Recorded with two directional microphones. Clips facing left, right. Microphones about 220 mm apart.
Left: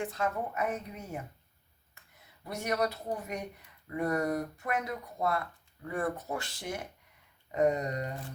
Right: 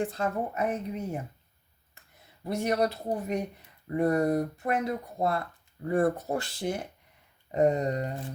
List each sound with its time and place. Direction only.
0.0 s speech: 30° right (ahead or behind)
2.4 s speech: 30° right (ahead or behind)
7.5 s a sound: 30° right (ahead or behind)